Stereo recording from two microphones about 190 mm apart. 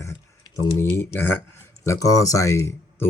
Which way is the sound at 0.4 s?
15° left (ahead or behind).